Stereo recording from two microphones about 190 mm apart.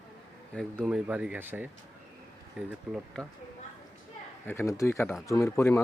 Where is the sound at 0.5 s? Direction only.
5° left (ahead or behind).